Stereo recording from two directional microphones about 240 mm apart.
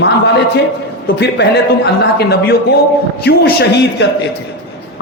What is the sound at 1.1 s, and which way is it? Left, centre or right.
A man's voice, left.